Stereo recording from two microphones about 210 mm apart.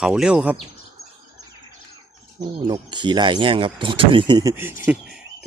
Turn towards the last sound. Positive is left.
turn(degrees=-5)  # may be behind; listen again after turning